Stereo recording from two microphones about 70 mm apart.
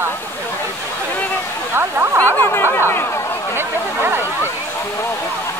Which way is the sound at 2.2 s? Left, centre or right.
Left.